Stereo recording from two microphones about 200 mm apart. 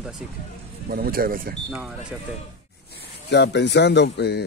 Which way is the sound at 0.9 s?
50° right (ahead or behind).